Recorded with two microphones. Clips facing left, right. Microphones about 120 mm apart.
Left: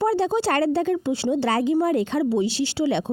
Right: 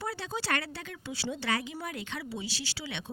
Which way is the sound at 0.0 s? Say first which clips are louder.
Left 16 dB; 30° left (ahead or behind).